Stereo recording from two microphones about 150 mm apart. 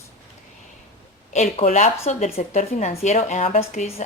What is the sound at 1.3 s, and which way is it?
A woman's voice, 50° left (ahead or behind).